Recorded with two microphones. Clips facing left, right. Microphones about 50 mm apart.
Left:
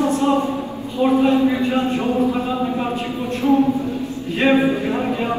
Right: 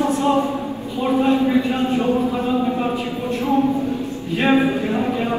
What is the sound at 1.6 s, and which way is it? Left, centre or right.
Speech, left.